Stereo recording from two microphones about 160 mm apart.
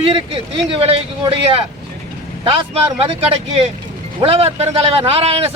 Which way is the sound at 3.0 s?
40° right (ahead or behind).